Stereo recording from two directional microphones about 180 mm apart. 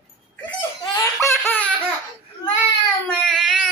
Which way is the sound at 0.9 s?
15° left (ahead or behind).